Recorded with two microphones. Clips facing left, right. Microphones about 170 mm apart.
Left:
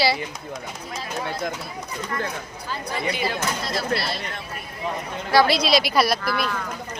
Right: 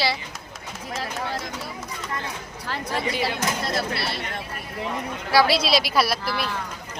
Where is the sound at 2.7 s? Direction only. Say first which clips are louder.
Right 1 dB; 90° right.